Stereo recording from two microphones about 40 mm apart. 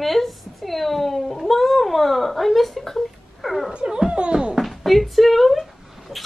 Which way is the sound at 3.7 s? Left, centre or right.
Centre.